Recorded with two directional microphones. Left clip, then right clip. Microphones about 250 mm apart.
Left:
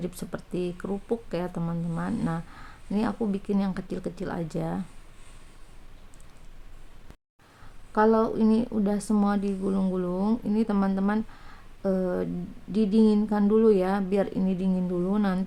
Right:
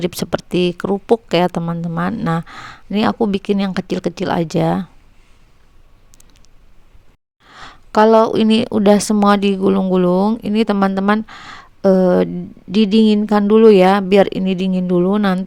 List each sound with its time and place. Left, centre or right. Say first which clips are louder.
0.0 s speech: right 15 dB; right
7.6 s speech: right 11 dB; right